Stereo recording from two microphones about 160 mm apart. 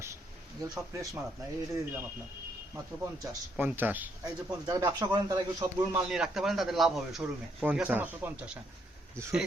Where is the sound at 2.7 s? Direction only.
15° right (ahead or behind).